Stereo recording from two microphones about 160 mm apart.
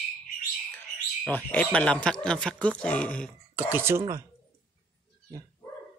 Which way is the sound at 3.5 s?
10° right (ahead or behind).